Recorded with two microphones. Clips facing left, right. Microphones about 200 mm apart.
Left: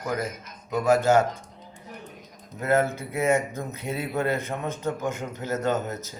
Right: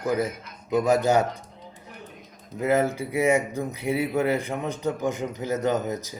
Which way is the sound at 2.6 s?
15° right (ahead or behind).